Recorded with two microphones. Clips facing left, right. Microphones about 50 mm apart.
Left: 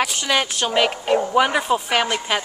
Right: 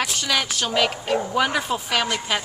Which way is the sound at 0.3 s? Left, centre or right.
Centre.